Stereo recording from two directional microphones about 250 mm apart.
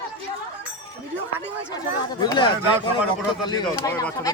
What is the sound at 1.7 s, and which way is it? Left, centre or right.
Speech, centre.